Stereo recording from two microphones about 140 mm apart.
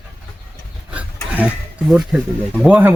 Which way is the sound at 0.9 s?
10° right (ahead or behind).